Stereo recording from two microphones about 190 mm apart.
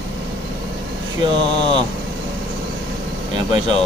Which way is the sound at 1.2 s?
25° right (ahead or behind).